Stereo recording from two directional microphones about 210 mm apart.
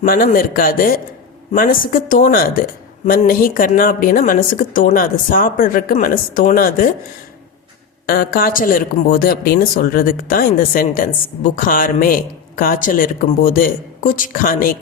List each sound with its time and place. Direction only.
0.0 s speech: 40° left (ahead or behind)
8.0 s speech: 45° left (ahead or behind)